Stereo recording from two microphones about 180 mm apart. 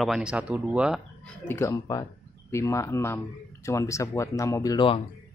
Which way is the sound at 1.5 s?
15° left (ahead or behind).